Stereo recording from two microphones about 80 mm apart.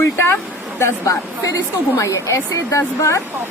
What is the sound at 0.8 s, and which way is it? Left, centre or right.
Speech, left.